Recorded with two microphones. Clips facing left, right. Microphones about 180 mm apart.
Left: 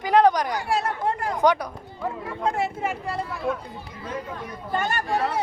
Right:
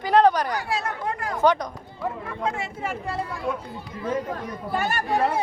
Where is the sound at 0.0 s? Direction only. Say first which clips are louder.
Even; 15° left (ahead or behind).